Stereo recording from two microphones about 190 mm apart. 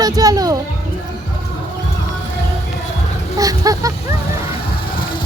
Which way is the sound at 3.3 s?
20° right (ahead or behind).